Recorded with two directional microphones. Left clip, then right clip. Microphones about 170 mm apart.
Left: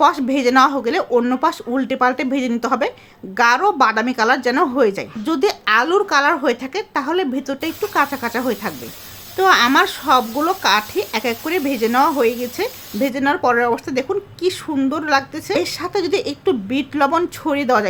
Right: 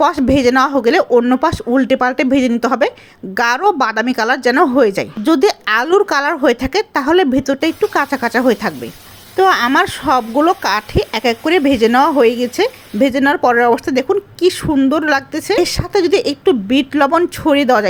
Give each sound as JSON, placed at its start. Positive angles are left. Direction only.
{"t": 0.0, "sound": "a woman's voice", "side_deg": -25}